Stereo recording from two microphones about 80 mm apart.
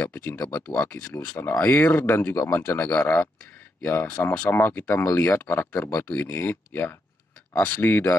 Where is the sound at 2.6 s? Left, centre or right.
Left.